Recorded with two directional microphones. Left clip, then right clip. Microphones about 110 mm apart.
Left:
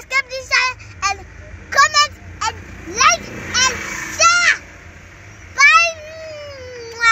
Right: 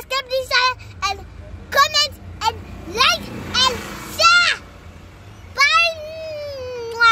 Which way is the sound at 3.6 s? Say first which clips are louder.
Even; 5° right (ahead or behind).